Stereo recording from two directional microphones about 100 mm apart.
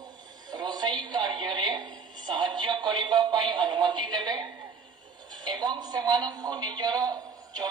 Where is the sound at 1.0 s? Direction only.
45° right (ahead or behind).